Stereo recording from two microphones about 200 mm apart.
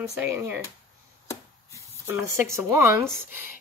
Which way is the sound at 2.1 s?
15° right (ahead or behind).